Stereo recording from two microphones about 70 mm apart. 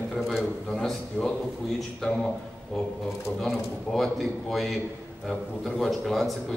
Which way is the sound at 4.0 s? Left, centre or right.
Centre.